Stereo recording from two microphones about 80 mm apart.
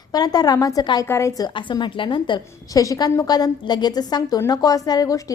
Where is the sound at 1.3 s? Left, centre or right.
Left.